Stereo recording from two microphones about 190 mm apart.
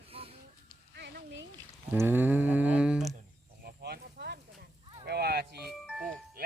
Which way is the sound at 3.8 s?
60° right (ahead or behind).